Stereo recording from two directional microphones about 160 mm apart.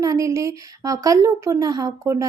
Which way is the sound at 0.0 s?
20° right (ahead or behind).